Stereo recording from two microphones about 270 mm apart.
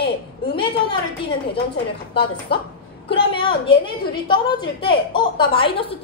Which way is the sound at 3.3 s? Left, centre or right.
Centre.